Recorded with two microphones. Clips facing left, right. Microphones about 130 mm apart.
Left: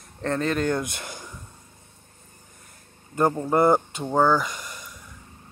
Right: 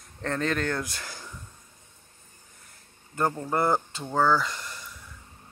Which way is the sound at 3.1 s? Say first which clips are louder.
Left 6 dB; 20° left (ahead or behind).